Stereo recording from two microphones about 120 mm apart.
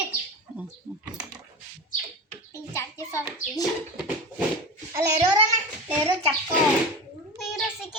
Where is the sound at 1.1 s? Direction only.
5° right (ahead or behind).